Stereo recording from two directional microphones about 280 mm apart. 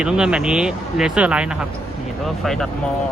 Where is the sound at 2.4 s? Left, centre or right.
Centre.